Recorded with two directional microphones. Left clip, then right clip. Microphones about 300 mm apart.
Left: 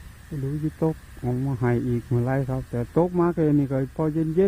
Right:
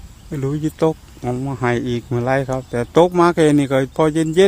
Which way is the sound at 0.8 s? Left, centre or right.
Centre.